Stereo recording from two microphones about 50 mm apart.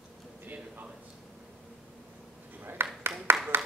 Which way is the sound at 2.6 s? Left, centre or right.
Right.